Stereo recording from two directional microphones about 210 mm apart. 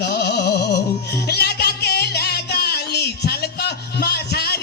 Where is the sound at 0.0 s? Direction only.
50° left (ahead or behind).